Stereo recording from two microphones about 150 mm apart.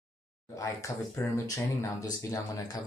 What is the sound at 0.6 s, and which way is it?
Speech, 20° left (ahead or behind).